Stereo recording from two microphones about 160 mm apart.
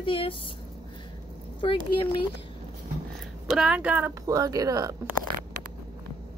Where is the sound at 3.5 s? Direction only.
5° right (ahead or behind); by 5.2 s 20° right (ahead or behind).